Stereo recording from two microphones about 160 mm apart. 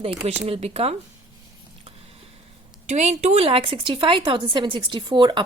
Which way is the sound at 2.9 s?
45° right (ahead or behind).